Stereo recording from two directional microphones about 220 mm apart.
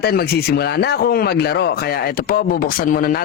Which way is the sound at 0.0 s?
45° left (ahead or behind).